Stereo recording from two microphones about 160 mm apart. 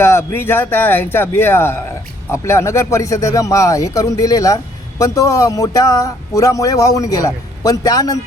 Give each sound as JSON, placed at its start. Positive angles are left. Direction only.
{"t": 0.0, "sound": "speech", "side_deg": 15}